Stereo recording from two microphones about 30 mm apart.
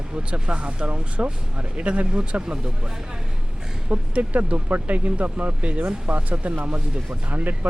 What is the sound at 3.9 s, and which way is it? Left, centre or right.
Speech, right.